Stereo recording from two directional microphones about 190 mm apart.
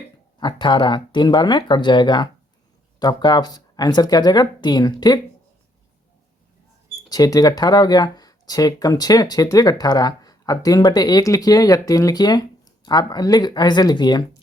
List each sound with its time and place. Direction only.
0.3 s speech: 25° left (ahead or behind)
7.1 s speech: 20° left (ahead or behind)